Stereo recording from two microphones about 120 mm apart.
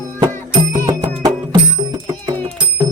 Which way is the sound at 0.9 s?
30° right (ahead or behind).